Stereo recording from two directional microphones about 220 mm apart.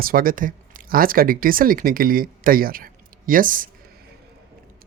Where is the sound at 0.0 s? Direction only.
40° right (ahead or behind).